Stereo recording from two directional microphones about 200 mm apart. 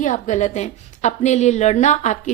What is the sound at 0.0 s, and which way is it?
A woman's voice, 40° left (ahead or behind).